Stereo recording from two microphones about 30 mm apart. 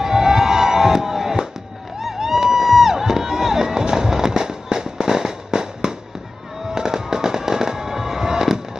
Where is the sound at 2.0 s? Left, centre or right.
Centre.